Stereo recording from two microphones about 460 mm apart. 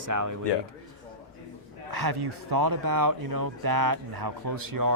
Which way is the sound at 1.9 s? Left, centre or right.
Right.